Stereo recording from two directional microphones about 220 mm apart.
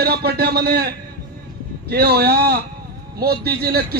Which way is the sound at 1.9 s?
45° right (ahead or behind).